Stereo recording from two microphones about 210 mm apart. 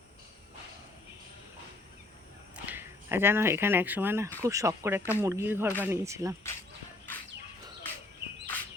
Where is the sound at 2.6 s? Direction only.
10° right (ahead or behind).